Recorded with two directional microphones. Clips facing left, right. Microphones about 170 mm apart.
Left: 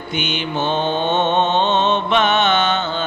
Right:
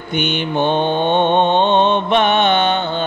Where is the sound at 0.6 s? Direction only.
55° right (ahead or behind).